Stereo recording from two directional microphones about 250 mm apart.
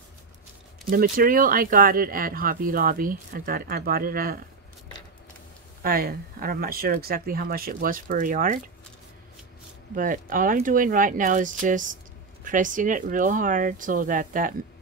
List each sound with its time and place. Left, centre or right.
0.8 s speech: right
5.8 s speech: right
9.9 s speech: right